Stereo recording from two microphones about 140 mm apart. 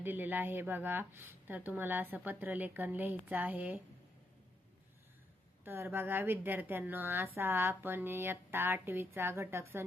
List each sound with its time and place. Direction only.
0.0 s speech: 15° right (ahead or behind)
5.6 s speech: 15° right (ahead or behind)